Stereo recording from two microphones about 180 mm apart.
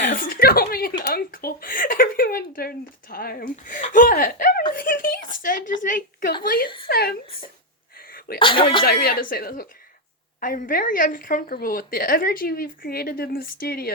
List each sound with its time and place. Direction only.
0.1 s speech: 50° left (ahead or behind)
4.7 s a sound: 50° left (ahead or behind)
6.8 s speech: 60° left (ahead or behind)
7.9 s sneeze: 55° left (ahead or behind)
8.4 s speech: 30° left (ahead or behind)
8.8 s a woman's voice: 60° left (ahead or behind)